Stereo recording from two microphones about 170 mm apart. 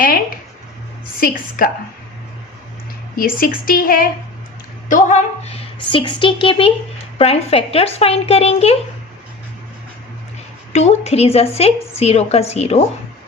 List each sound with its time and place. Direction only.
1.2 s a woman's voice: 55° left (ahead or behind)
3.2 s a woman's voice: 55° left (ahead or behind); by 8.7 s 35° left (ahead or behind)
10.7 s a woman's voice: 40° left (ahead or behind)